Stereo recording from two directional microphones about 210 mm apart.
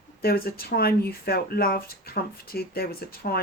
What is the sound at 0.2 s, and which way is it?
Speech, 45° left (ahead or behind).